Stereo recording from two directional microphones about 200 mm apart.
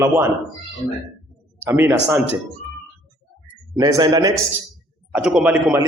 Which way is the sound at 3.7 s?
20° right (ahead or behind).